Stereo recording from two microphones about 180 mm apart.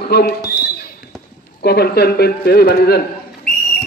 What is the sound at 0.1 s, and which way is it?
Speech, 65° left (ahead or behind).